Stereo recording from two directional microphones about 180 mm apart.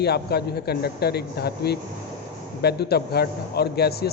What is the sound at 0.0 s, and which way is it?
A man's voice, 65° left (ahead or behind).